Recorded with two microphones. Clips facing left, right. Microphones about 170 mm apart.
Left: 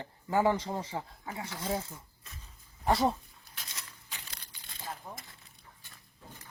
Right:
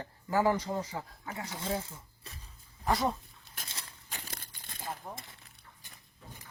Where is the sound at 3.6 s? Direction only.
45° right (ahead or behind).